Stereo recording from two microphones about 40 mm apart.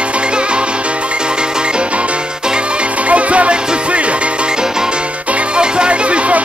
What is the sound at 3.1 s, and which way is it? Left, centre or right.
Music, right.